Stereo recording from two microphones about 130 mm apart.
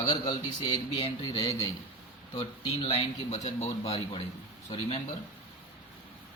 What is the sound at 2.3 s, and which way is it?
A man's voice, 45° left (ahead or behind).